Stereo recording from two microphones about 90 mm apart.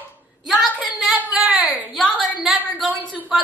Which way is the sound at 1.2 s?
15° right (ahead or behind).